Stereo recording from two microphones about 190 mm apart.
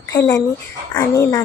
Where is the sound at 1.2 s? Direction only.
15° left (ahead or behind).